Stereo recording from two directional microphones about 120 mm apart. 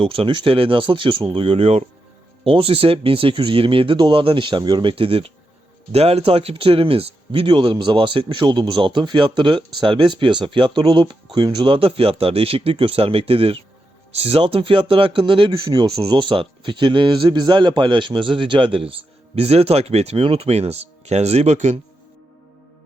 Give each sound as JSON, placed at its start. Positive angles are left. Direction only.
{"t": 0.0, "sound": "speech", "side_deg": -50}